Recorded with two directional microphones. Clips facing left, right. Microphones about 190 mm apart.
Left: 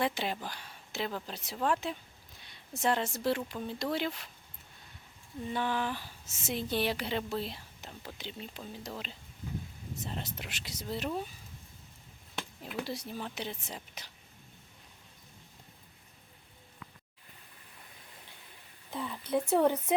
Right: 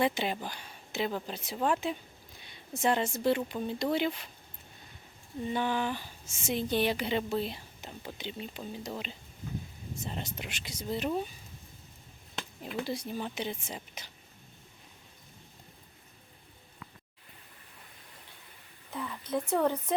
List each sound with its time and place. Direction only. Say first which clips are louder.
0.0 s speech: right 3 dB; centre (ahead or behind)
5.5 s speech: right 2 dB; centre (ahead or behind)
12.4 s speech: right 2 dB; centre (ahead or behind)
18.9 s speech: left 1 dB; 15° left (ahead or behind)